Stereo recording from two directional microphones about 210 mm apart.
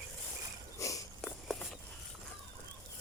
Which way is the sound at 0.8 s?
15° left (ahead or behind).